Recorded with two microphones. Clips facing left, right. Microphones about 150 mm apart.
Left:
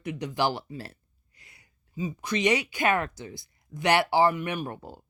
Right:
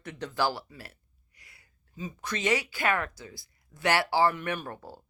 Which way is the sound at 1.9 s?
10° left (ahead or behind).